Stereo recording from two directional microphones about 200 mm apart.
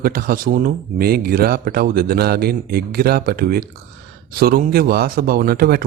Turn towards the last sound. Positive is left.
turn(degrees=-50)  # may be behind; listen again after turning